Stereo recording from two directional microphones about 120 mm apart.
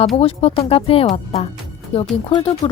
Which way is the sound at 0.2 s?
50° left (ahead or behind).